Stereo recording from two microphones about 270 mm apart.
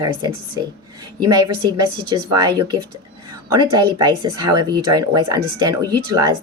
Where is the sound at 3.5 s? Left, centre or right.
Centre.